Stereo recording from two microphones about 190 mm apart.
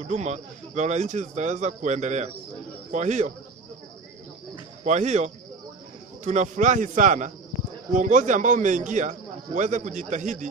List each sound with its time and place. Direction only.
0.0 s a man's voice: 35° right (ahead or behind)
4.8 s a man's voice: 40° right (ahead or behind)